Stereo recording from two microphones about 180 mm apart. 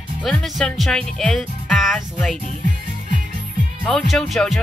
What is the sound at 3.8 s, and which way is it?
Speech, centre (ahead or behind).